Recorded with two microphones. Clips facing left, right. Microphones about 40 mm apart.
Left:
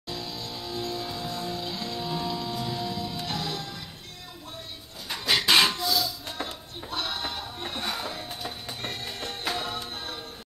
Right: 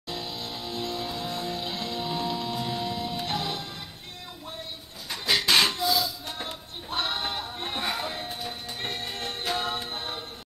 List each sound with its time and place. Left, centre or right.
0.1 s music: right
5.1 s a sound: centre
5.8 s a sound: centre
6.4 s music: right
7.8 s music: centre
8.8 s music: right